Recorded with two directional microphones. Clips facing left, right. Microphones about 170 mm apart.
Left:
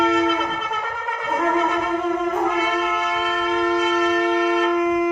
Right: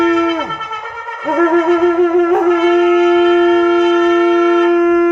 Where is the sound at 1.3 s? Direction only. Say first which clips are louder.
Right 10 dB; 70° right (ahead or behind).